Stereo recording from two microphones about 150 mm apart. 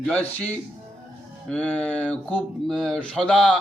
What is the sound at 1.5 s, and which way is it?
A man's voice, 10° left (ahead or behind).